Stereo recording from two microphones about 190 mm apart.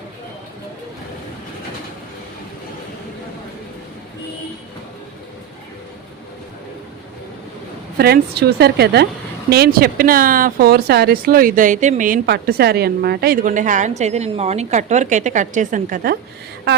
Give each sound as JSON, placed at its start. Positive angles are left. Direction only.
{"t": 7.9, "sound": "a woman's voice", "side_deg": -55}